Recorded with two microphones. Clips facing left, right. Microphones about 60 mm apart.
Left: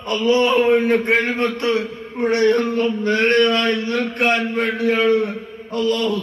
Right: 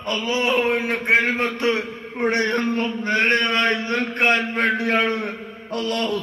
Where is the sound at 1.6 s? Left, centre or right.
Right.